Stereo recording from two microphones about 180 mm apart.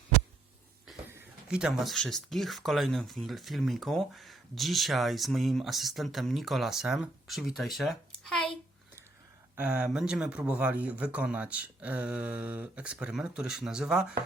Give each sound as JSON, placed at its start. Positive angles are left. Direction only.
{"t": 1.1, "sound": "speech", "side_deg": -10}
{"t": 9.6, "sound": "speech", "side_deg": -10}